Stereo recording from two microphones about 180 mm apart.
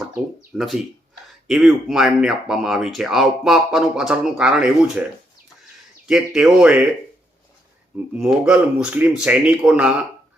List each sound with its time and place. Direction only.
0.5 s speech: centre (ahead or behind)
6.1 s speech: centre (ahead or behind)
8.1 s speech: 5° right (ahead or behind)